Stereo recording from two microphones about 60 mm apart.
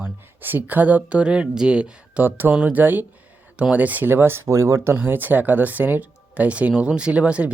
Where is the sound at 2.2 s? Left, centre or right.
Right.